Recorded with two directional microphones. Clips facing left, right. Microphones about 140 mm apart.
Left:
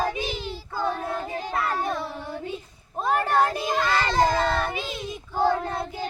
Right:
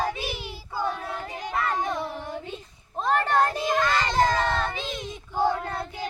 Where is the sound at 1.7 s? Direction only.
15° right (ahead or behind).